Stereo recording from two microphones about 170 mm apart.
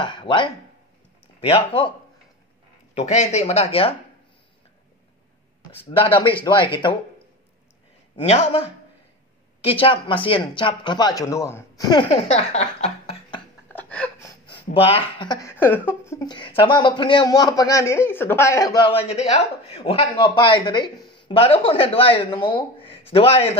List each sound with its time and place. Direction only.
0.0 s a man's voice: 30° left (ahead or behind)
5.8 s speech: 35° left (ahead or behind)
8.2 s a man's voice: 35° left (ahead or behind)
13.7 s a sound: 10° left (ahead or behind)
14.4 s speech: 35° left (ahead or behind)
15.4 s a sound: 10° left (ahead or behind)
16.1 s speech: 20° left (ahead or behind)
18.9 s a man's voice: 35° left (ahead or behind)